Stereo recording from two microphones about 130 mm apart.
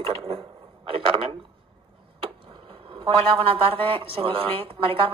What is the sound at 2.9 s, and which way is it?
A woman's voice, 45° right (ahead or behind).